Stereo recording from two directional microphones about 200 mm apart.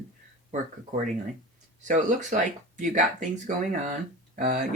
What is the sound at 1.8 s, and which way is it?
Speech, 40° right (ahead or behind).